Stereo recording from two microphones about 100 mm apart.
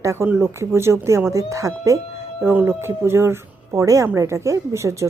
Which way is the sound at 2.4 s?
20° right (ahead or behind).